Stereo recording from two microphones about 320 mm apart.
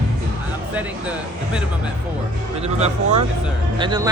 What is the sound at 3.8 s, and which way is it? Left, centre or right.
Speech, centre.